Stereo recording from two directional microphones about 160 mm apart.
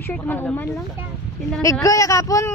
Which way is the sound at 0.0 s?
10° left (ahead or behind).